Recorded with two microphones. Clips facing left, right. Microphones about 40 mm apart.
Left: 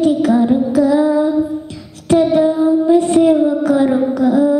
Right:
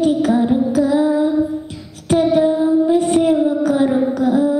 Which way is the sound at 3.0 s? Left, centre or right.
Centre.